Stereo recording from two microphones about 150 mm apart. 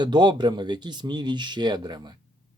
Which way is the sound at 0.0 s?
30° right (ahead or behind).